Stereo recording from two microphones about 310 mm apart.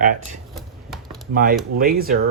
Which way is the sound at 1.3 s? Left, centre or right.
Right.